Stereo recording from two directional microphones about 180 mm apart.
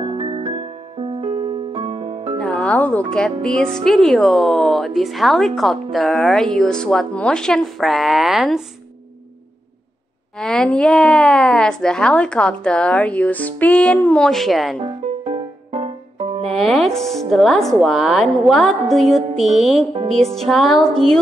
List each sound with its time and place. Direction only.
0.0 s music: 25° right (ahead or behind)
2.4 s speech: 5° left (ahead or behind)
10.4 s speech: 5° left (ahead or behind)
14.8 s music: 30° right (ahead or behind)
16.4 s speech: centre (ahead or behind)
19.9 s speech: 30° right (ahead or behind)
20.4 s speech: centre (ahead or behind)